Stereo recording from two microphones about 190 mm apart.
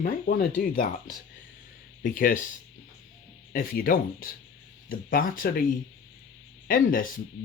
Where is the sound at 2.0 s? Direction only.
45° left (ahead or behind).